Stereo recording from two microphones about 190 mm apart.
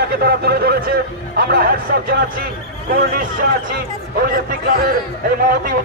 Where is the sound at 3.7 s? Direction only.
50° right (ahead or behind).